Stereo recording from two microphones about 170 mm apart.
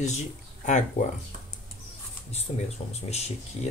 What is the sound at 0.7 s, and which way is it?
Speech, 50° left (ahead or behind).